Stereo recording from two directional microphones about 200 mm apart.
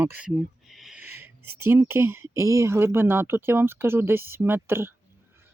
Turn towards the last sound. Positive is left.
turn(degrees=-10)  # may be behind; listen again after turning